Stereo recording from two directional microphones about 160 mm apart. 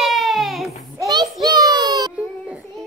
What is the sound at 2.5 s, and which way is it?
Music, 5° right (ahead or behind).